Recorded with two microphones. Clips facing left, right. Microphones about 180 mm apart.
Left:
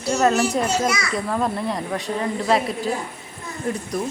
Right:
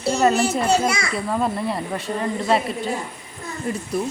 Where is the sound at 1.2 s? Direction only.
5° right (ahead or behind).